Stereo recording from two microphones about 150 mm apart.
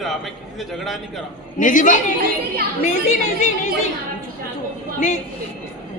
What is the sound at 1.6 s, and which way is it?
Speech, 60° left (ahead or behind).